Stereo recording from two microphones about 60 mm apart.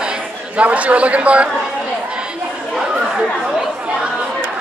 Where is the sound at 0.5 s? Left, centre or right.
Right.